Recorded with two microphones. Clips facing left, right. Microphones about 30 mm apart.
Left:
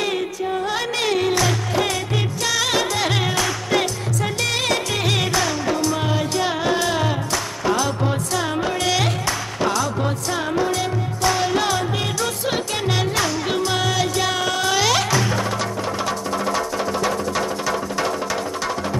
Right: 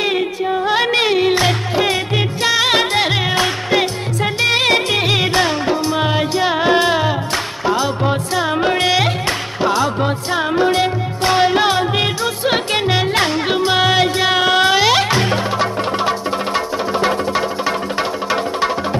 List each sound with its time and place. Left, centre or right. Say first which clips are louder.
0.0 s music: right 5 dB; right
7.6 s music: right 3 dB; right
8.4 s music: right 7 dB; right